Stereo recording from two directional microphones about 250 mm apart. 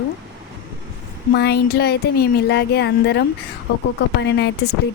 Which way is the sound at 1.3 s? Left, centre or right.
Left.